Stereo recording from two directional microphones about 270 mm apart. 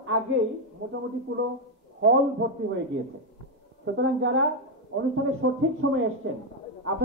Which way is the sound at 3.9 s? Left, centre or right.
Right.